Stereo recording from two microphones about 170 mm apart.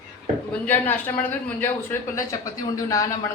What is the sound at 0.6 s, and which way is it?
A man's voice, 10° left (ahead or behind).